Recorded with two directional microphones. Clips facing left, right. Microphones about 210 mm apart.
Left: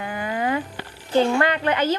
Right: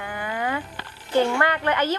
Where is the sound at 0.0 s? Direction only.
20° left (ahead or behind).